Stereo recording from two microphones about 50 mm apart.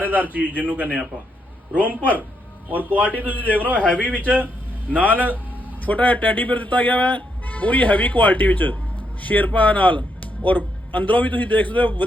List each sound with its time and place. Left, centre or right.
0.0 s a man's voice: right
2.9 s speech: left
3.5 s a man's voice: right
5.8 s speech: left